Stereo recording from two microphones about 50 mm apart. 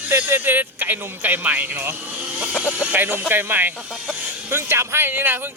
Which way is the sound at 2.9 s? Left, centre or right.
Right.